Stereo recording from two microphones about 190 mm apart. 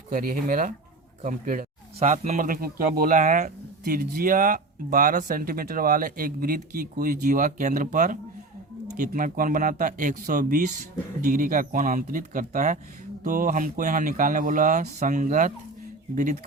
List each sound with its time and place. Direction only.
0.1 s a man's voice: 45° right (ahead or behind)